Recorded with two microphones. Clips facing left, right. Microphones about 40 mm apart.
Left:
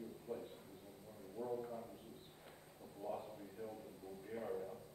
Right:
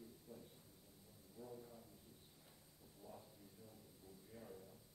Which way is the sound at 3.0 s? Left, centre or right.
Left.